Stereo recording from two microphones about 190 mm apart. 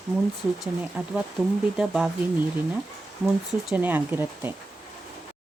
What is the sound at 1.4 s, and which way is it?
Speech, 5° right (ahead or behind).